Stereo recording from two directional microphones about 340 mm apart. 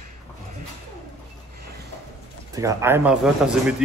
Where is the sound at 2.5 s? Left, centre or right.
Centre.